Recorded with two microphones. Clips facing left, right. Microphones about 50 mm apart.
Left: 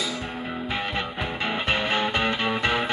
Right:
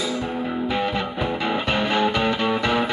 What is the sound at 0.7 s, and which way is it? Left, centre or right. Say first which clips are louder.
Music: right 3 dB; centre.